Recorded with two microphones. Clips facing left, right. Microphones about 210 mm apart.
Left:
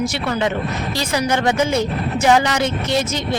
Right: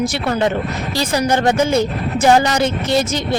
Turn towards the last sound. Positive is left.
turn(degrees=-35)  # may be behind; listen again after turning